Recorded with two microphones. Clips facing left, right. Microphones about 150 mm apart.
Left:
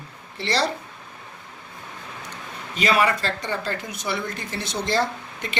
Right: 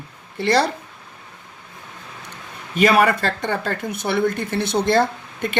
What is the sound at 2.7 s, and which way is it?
Speech, 55° right (ahead or behind).